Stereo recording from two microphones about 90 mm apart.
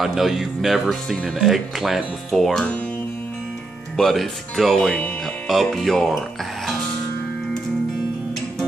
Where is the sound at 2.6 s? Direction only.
15° left (ahead or behind).